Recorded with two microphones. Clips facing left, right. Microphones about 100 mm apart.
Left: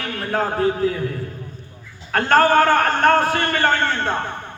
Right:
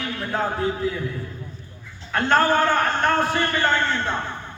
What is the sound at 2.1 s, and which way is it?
A man's voice, 55° left (ahead or behind).